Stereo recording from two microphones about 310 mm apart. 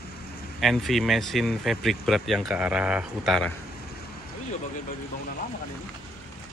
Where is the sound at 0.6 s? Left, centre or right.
Centre.